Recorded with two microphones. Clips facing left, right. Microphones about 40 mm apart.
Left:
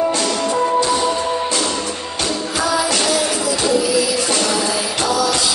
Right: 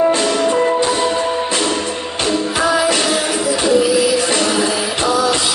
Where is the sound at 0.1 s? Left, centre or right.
Right.